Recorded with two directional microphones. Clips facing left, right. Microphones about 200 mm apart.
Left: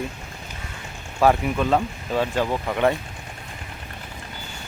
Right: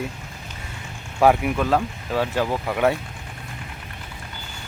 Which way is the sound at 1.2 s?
10° right (ahead or behind).